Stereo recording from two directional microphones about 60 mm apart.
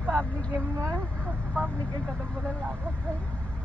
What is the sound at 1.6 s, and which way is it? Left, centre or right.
Vehicle, centre.